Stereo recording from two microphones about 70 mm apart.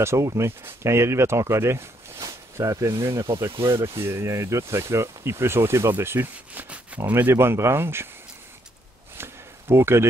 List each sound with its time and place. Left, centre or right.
0.0 s speech: right
2.6 s speech: right
3.8 s speech: right
9.1 s a sound: right